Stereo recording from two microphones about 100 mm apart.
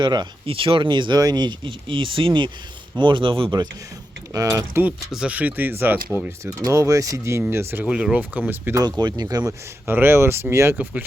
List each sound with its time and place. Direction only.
0.0 s speech: 45° right (ahead or behind)
0.4 s speech: 65° right (ahead or behind)
4.3 s speech: 35° right (ahead or behind)
4.7 s speech: 15° right (ahead or behind)
6.6 s speech: 35° right (ahead or behind)
7.9 s speech: 10° right (ahead or behind)
8.7 s speech: 40° right (ahead or behind)
9.5 s speech: 20° right (ahead or behind)